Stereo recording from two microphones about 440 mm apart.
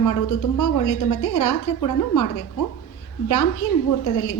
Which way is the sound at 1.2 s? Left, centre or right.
Left.